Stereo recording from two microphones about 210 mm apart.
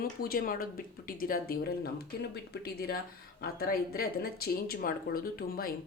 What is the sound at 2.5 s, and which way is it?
Speech, 50° left (ahead or behind).